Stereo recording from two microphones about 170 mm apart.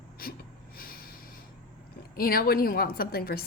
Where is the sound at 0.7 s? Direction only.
60° left (ahead or behind).